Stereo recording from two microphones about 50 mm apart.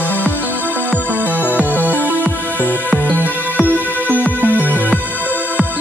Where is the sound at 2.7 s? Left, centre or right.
Left.